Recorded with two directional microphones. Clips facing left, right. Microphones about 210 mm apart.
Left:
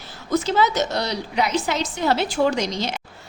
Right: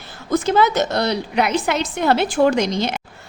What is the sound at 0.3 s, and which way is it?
A woman's voice, 55° right (ahead or behind).